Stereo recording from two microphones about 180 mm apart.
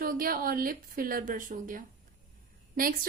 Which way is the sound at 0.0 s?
55° right (ahead or behind).